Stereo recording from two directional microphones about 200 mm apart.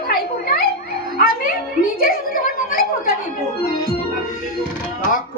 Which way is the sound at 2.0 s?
45° left (ahead or behind).